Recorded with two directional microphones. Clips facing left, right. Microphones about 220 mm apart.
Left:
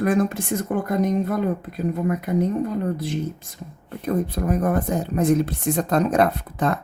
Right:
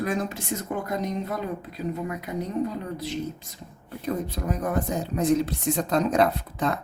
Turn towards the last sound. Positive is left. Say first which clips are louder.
# left 3 dB
turn(degrees=55)  # may be behind; listen again after turning